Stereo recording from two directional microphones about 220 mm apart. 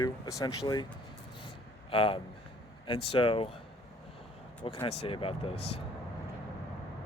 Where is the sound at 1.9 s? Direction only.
25° left (ahead or behind).